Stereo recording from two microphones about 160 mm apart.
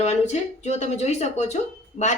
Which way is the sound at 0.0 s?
45° left (ahead or behind).